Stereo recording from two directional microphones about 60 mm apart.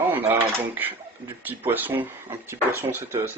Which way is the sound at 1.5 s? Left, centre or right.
Right.